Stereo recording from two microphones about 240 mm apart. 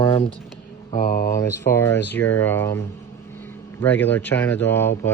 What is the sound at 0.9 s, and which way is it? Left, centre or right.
Speech, left.